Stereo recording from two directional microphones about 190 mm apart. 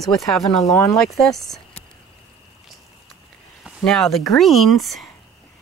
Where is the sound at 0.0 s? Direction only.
Centre (ahead or behind).